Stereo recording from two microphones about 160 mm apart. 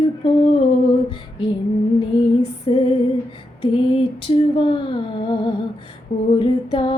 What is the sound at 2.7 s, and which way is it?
A woman's voice, 40° left (ahead or behind).